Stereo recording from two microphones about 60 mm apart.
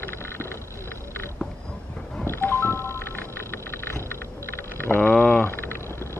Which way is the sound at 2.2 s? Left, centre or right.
Left.